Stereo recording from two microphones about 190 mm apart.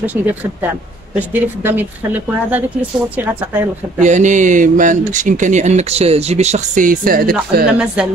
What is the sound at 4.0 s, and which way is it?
Speech, 40° right (ahead or behind).